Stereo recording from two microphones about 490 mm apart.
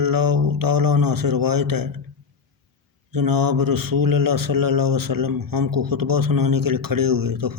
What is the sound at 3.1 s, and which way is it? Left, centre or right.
A man's voice, right.